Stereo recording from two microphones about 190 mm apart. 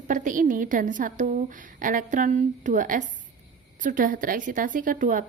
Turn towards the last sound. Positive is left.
turn(degrees=-45)  # may be behind; listen again after turning